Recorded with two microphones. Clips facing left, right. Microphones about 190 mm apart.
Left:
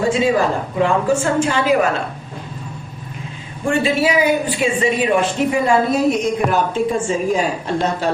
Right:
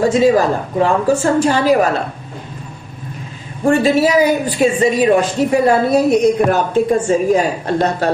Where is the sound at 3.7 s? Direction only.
40° right (ahead or behind).